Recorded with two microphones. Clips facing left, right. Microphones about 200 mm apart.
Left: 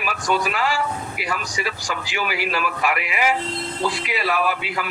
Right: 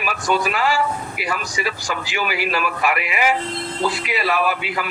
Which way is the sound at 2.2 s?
65° right (ahead or behind).